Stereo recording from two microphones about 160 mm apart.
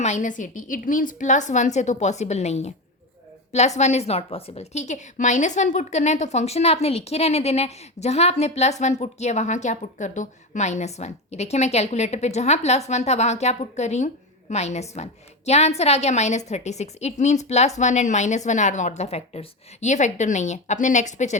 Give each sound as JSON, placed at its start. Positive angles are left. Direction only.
{"t": 0.0, "sound": "a woman's voice", "side_deg": 50}